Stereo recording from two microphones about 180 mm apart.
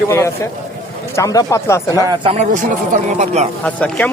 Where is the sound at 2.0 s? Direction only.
30° right (ahead or behind).